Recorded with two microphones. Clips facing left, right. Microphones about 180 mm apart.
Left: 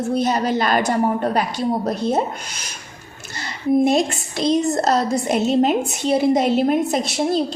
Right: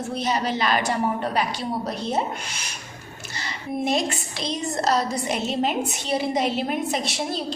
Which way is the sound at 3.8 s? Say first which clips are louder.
Left 6 dB; 50° left (ahead or behind).